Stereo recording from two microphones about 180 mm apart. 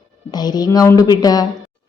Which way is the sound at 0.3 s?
20° left (ahead or behind).